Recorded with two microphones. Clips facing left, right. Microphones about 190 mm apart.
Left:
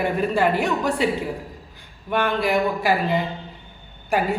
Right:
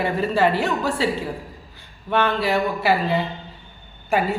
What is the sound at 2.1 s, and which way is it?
Speech, 10° left (ahead or behind).